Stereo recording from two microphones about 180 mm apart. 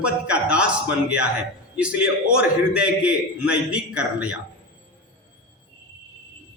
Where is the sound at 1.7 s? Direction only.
5° right (ahead or behind).